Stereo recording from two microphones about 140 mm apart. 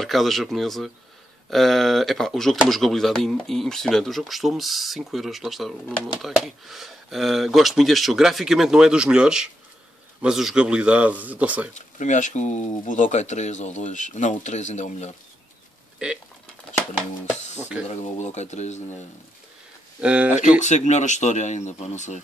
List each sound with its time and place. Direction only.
0.0 s speech: centre (ahead or behind)
11.7 s speech: 60° left (ahead or behind)
17.4 s speech: 55° left (ahead or behind)
20.0 s speech: 10° right (ahead or behind)
20.3 s speech: 60° left (ahead or behind)